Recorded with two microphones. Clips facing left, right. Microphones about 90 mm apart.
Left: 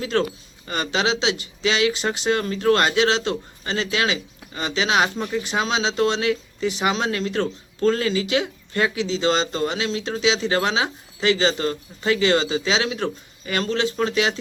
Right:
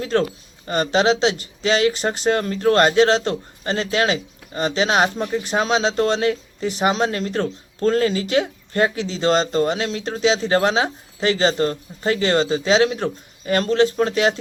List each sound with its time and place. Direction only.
0.0 s speech: 45° right (ahead or behind)